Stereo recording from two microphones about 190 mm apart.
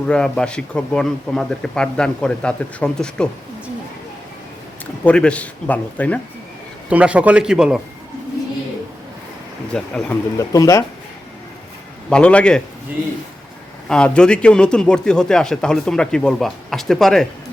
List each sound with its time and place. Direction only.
0.1 s a man's voice: 5° left (ahead or behind)
5.0 s a man's voice: 5° left (ahead or behind)
6.9 s a man's voice: 5° right (ahead or behind)
9.7 s a man's voice: 5° left (ahead or behind)
10.3 s a man's voice: 15° left (ahead or behind)
12.1 s a man's voice: 5° left (ahead or behind)
13.8 s a man's voice: 5° left (ahead or behind)